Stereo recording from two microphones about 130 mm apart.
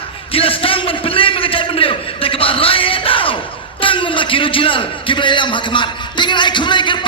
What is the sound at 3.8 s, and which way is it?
A man's voice, 40° left (ahead or behind).